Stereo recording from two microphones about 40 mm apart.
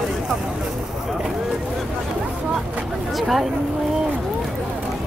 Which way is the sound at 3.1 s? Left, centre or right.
Centre.